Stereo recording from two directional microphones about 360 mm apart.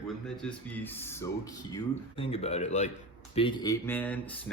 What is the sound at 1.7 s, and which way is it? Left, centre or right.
Speech, centre.